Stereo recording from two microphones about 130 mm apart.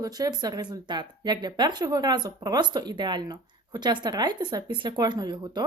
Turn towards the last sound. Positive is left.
turn(degrees=-35)  # may be behind; listen again after turning